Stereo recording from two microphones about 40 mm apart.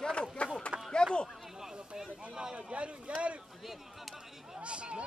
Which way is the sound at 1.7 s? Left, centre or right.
Centre.